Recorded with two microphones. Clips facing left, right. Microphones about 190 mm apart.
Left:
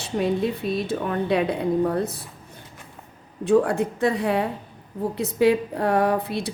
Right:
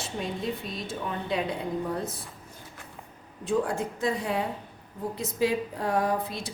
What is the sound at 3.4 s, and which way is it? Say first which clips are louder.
A woman's voice: left 8 dB; 65° left (ahead or behind).